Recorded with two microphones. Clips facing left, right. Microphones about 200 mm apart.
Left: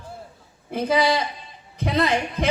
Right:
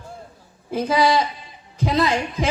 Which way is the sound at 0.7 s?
60° left (ahead or behind).